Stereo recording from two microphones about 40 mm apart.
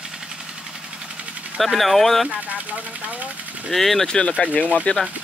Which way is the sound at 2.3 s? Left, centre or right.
Right.